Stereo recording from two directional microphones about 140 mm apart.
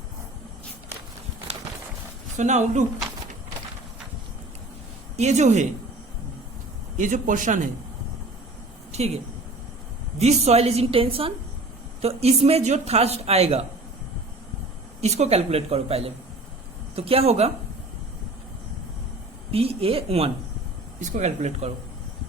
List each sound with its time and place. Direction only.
2.4 s speech: 60° right (ahead or behind)
5.1 s speech: 55° right (ahead or behind)
6.9 s speech: 65° right (ahead or behind)
8.9 s speech: 50° right (ahead or behind)
15.0 s speech: 50° right (ahead or behind)
19.5 s speech: 45° right (ahead or behind)